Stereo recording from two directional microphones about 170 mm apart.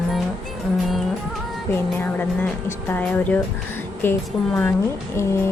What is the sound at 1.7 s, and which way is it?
Speech, 10° left (ahead or behind).